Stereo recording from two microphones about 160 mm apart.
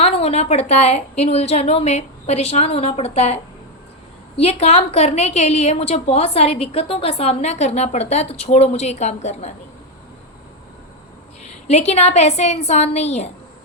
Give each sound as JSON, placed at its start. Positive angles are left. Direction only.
{"t": 0.0, "sound": "a woman's voice", "side_deg": 40}
{"t": 4.4, "sound": "a woman's voice", "side_deg": 40}
{"t": 11.7, "sound": "a woman's voice", "side_deg": 40}